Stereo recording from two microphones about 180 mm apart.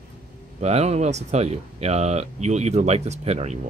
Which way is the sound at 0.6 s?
35° right (ahead or behind).